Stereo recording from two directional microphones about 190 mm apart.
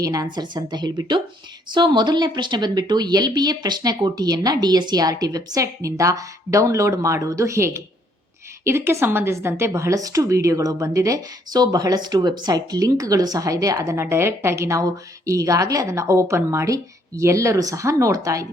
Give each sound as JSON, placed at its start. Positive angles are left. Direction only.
{"t": 0.0, "sound": "a woman's voice", "side_deg": -20}